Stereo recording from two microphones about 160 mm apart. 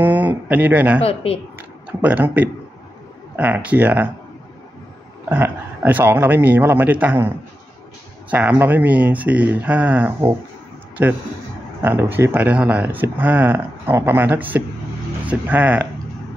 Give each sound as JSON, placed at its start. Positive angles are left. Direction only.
{"t": 0.0, "sound": "speech", "side_deg": -10}
{"t": 1.0, "sound": "speech", "side_deg": 40}
{"t": 1.6, "sound": "speech", "side_deg": -10}
{"t": 5.3, "sound": "speech", "side_deg": -10}